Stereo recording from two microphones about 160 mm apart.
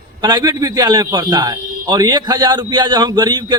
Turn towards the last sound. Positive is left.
turn(degrees=-25)  # may be behind; listen again after turning